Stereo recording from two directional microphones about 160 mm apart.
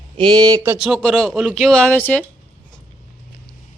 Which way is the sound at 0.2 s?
30° right (ahead or behind).